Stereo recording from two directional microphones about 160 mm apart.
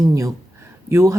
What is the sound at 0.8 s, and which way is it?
Speech, 15° right (ahead or behind).